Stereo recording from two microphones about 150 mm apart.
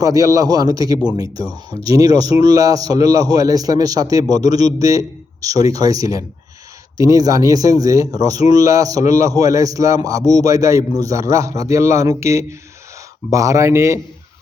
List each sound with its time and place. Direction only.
0.0 s speech: 25° right (ahead or behind)